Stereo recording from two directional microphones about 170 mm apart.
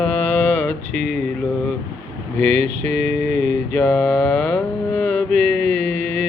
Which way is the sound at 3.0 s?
5° left (ahead or behind).